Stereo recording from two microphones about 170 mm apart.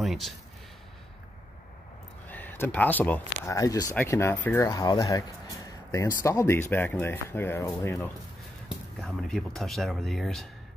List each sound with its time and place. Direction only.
0.0 s speech: centre (ahead or behind)
2.2 s speech: 10° left (ahead or behind)
8.6 s speech: centre (ahead or behind)